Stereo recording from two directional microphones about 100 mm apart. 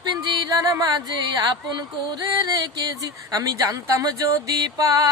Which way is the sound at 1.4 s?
45° right (ahead or behind).